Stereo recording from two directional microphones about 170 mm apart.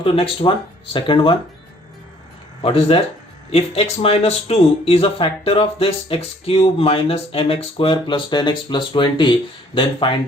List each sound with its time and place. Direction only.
0.0 s speech: 30° left (ahead or behind)
2.6 s speech: 35° left (ahead or behind)